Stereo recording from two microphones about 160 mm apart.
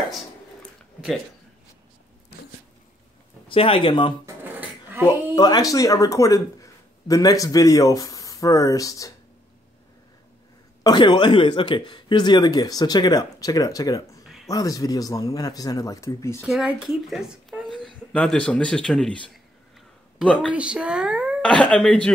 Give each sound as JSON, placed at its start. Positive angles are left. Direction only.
{"t": 3.4, "sound": "speech", "side_deg": 35}
{"t": 4.3, "sound": "a sound", "side_deg": -10}
{"t": 5.0, "sound": "speech", "side_deg": 25}
{"t": 10.8, "sound": "speech", "side_deg": 25}
{"t": 16.3, "sound": "speech", "side_deg": -5}
{"t": 20.2, "sound": "speech", "side_deg": -5}
{"t": 21.4, "sound": "speech", "side_deg": 5}